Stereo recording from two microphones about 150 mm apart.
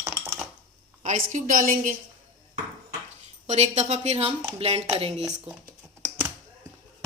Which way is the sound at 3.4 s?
45° right (ahead or behind).